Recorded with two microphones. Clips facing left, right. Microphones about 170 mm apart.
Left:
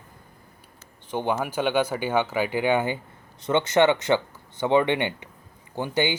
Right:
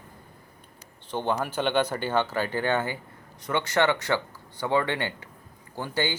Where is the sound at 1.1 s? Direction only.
10° left (ahead or behind).